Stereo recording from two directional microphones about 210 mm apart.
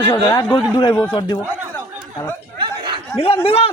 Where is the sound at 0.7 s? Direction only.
25° left (ahead or behind).